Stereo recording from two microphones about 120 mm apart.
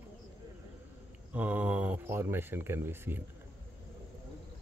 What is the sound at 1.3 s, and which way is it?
Speech, 15° right (ahead or behind).